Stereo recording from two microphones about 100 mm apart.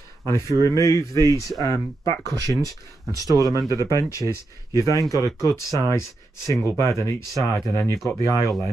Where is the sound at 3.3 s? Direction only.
35° right (ahead or behind).